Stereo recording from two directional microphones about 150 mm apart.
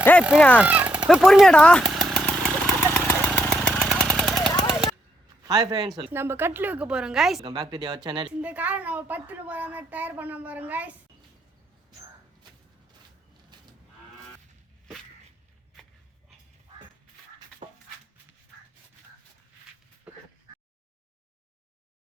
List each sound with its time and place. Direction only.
0.0 s fowl: 10° left (ahead or behind)
0.6 s chainsaw: 10° right (ahead or behind)
3.1 s vehicle: 10° left (ahead or behind)
5.4 s a man's voice: 25° right (ahead or behind)
6.1 s a woman's voice: 15° right (ahead or behind)
7.4 s speech: 30° right (ahead or behind)
8.4 s a woman's voice: 10° right (ahead or behind)
13.5 s cattle: 30° right (ahead or behind)
17.6 s dog: 50° right (ahead or behind)